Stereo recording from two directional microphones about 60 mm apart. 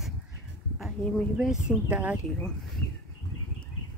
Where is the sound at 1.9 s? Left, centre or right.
Right.